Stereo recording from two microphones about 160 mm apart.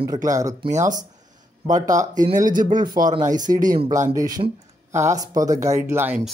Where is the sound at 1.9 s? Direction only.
50° right (ahead or behind).